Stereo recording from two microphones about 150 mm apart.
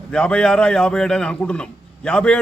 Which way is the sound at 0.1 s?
5° left (ahead or behind).